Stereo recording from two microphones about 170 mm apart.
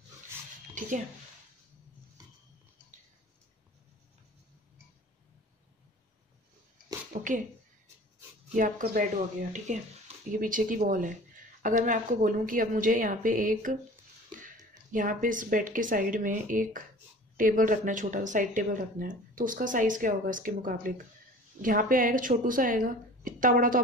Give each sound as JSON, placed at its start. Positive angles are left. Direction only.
{"t": 0.7, "sound": "speech", "side_deg": -50}
{"t": 7.1, "sound": "speech", "side_deg": -50}
{"t": 8.5, "sound": "speech", "side_deg": -50}
{"t": 14.9, "sound": "speech", "side_deg": -50}